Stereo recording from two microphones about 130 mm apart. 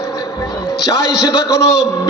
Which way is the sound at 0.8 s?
25° left (ahead or behind).